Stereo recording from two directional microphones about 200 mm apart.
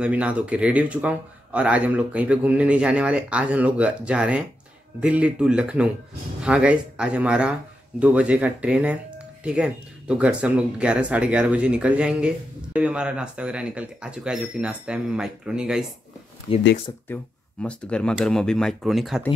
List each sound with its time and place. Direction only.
0.0 s speech: 5° right (ahead or behind)
16.5 s speech: 25° left (ahead or behind)
17.1 s speech: 5° left (ahead or behind)